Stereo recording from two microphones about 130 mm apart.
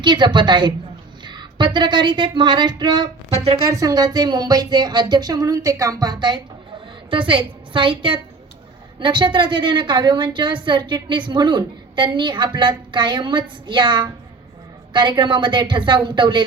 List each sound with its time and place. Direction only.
0.0 s a woman's voice: 35° right (ahead or behind)
3.3 s speech: 50° right (ahead or behind)
3.7 s a woman's voice: 25° right (ahead or behind)